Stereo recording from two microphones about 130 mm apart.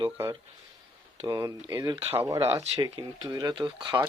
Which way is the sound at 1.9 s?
50° right (ahead or behind).